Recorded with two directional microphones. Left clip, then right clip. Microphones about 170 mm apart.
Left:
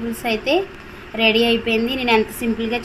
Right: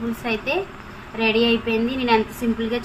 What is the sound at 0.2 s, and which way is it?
A woman's voice, 50° left (ahead or behind).